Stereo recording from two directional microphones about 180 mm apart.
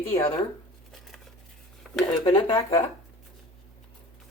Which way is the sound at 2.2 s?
30° left (ahead or behind).